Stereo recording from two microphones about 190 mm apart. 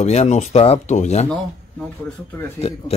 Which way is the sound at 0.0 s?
35° left (ahead or behind).